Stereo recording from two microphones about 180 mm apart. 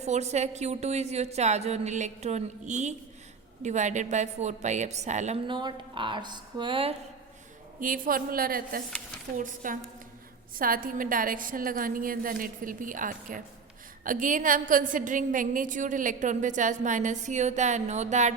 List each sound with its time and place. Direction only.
0.0 s a woman's voice: 40° right (ahead or behind)
5.5 s speech: 25° right (ahead or behind)
7.8 s a woman's voice: 50° right (ahead or behind)